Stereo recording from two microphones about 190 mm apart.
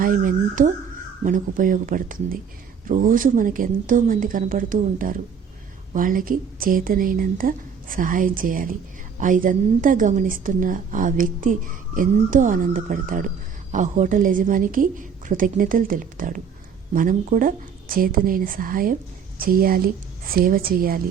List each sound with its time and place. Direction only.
0.0 s speech: 45° right (ahead or behind)